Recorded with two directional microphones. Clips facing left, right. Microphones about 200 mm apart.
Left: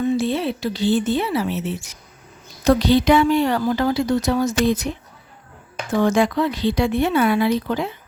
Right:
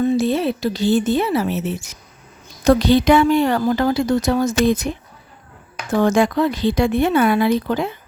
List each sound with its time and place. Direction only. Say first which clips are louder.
0.0 s speech: right 3 dB; 40° right (ahead or behind)
6.0 s speech: right 2 dB; 45° right (ahead or behind)